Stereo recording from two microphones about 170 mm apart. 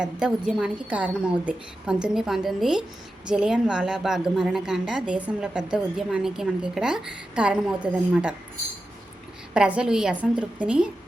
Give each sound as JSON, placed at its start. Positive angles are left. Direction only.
{"t": 0.0, "sound": "a woman's voice", "side_deg": -5}
{"t": 9.6, "sound": "a woman's voice", "side_deg": -5}